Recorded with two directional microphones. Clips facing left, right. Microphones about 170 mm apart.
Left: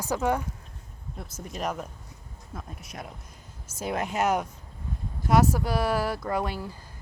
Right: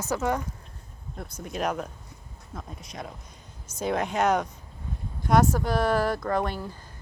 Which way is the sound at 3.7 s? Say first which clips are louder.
Right 3 dB; 5° left (ahead or behind).